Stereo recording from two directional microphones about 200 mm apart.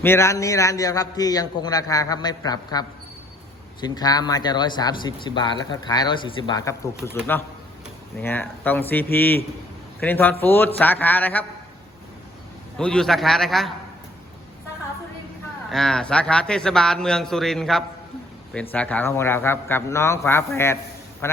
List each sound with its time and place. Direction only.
0.0 s a man's voice: 15° left (ahead or behind)
12.7 s a man's voice: 5° left (ahead or behind)
15.7 s a man's voice: 5° left (ahead or behind)